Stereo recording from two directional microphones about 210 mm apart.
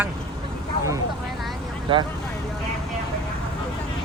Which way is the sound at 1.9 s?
25° right (ahead or behind).